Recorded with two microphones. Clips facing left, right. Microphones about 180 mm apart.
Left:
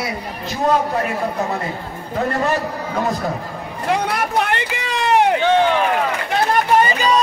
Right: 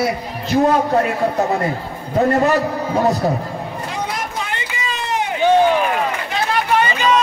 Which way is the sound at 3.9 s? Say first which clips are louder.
Left 9 dB; 65° left (ahead or behind).